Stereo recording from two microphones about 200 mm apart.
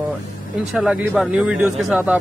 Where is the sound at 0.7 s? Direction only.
Centre (ahead or behind).